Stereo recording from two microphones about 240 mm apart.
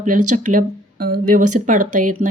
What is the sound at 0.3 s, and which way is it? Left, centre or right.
A woman's voice, right.